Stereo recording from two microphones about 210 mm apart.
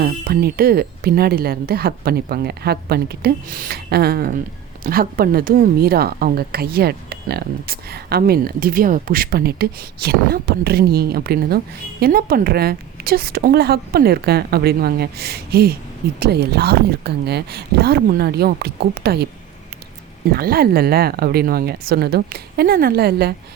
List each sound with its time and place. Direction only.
0.0 s a woman's voice: 45° right (ahead or behind)
20.3 s a woman's voice: 45° right (ahead or behind)